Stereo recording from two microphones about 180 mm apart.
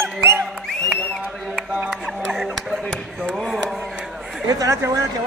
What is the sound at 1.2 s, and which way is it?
Speech, 5° right (ahead or behind).